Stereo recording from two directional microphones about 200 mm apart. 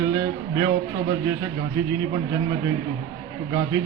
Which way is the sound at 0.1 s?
20° right (ahead or behind).